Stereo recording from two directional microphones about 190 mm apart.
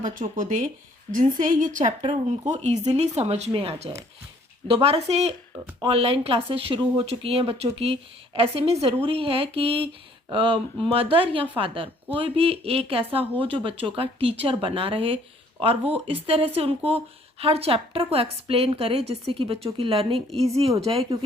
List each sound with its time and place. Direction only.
0.0 s a woman's voice: 45° right (ahead or behind)
2.0 s a woman's voice: 30° right (ahead or behind)